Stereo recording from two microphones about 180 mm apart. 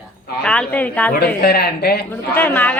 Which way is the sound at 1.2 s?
60° left (ahead or behind).